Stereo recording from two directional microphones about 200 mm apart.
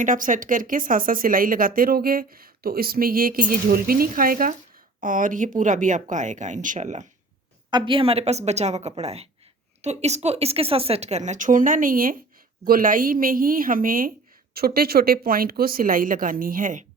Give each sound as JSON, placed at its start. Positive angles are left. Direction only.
{"t": 0.0, "sound": "speech", "side_deg": -40}
{"t": 7.7, "sound": "speech", "side_deg": -25}